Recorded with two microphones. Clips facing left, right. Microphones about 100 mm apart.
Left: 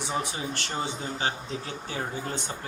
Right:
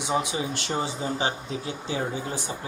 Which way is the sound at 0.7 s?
20° right (ahead or behind).